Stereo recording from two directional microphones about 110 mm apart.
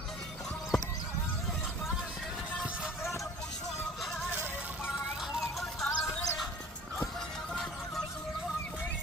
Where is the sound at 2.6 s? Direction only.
5° right (ahead or behind).